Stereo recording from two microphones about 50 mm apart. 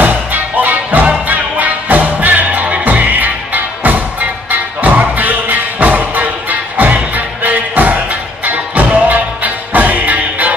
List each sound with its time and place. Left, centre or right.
0.0 s music: right